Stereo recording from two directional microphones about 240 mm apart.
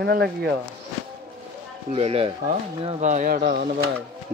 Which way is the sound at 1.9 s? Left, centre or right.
Right.